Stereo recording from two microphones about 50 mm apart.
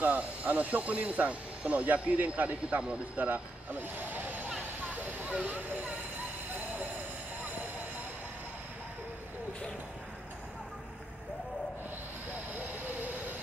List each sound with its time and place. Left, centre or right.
0.0 s speech: right
4.1 s a sound: right
5.3 s speech: right